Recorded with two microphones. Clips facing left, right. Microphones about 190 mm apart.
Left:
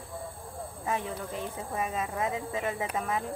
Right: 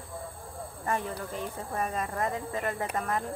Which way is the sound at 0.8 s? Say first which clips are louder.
Right 1 dB; centre (ahead or behind).